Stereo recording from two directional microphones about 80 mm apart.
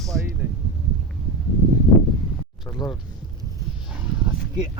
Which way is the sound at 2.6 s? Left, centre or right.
Left.